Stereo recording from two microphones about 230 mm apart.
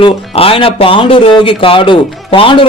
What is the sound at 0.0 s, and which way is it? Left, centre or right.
Speech, left.